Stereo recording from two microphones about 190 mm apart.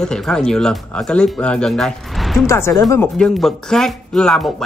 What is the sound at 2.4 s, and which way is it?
Speech, 15° left (ahead or behind).